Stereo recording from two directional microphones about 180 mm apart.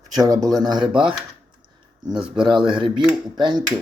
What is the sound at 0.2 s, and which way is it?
Speech, 20° right (ahead or behind).